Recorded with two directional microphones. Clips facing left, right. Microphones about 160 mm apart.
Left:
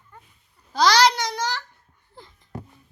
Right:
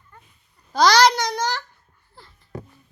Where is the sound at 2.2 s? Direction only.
15° left (ahead or behind).